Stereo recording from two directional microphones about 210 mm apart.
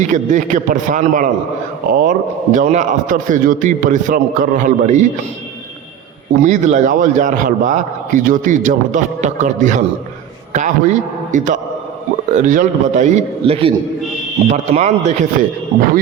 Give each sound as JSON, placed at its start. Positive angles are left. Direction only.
{"t": 0.0, "sound": "a man's voice", "side_deg": -35}
{"t": 6.4, "sound": "a man's voice", "side_deg": -35}